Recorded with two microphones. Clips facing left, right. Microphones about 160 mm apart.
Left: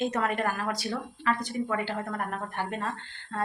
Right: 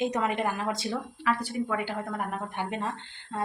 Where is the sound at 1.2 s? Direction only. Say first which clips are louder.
Even; 10° right (ahead or behind).